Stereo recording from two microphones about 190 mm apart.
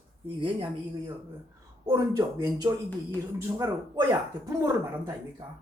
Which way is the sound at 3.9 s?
20° right (ahead or behind).